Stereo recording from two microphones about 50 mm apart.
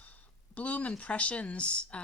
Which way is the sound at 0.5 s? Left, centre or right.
Left.